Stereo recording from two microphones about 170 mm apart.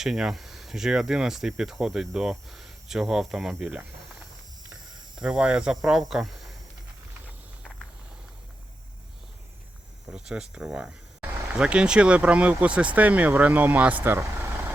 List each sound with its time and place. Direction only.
0.0 s speech: centre (ahead or behind)
4.7 s cricket: 25° right (ahead or behind)
5.2 s speech: 5° right (ahead or behind)
10.1 s speech: 5° right (ahead or behind)